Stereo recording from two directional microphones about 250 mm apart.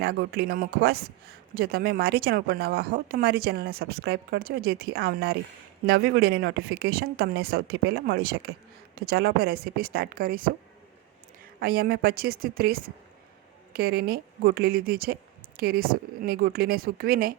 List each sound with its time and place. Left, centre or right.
0.0 s speech: right
11.6 s speech: right